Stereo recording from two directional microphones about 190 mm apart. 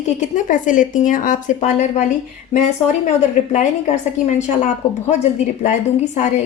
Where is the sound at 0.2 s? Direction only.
40° left (ahead or behind).